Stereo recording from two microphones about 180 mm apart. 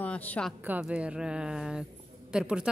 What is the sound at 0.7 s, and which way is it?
Speech, 5° right (ahead or behind).